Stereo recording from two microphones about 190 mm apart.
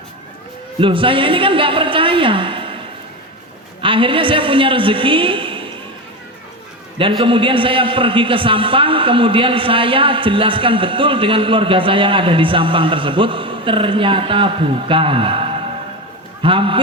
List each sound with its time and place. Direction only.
0.8 s a man's voice: 25° right (ahead or behind)
3.8 s a woman's voice: 25° right (ahead or behind)
7.0 s a man's voice: 25° right (ahead or behind)